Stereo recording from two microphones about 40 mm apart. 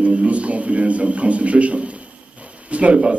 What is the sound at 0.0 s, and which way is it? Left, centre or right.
A man's voice, right.